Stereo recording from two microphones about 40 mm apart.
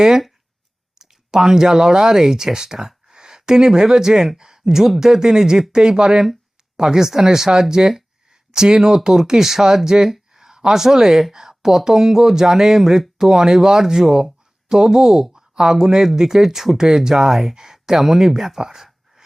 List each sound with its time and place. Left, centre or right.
0.9 s speech: centre